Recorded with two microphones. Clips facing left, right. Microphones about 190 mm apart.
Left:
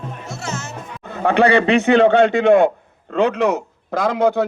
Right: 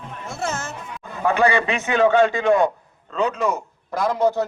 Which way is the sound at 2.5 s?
60° left (ahead or behind).